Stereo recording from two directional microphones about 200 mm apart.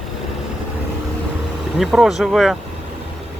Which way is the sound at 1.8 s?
Centre (ahead or behind).